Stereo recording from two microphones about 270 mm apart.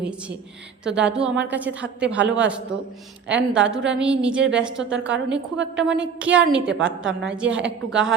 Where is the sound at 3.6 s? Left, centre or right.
Centre.